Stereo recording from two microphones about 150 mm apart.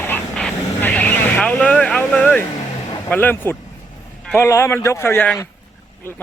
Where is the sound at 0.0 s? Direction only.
10° left (ahead or behind).